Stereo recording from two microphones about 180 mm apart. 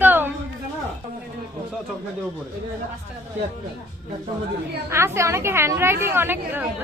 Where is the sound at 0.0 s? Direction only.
10° right (ahead or behind).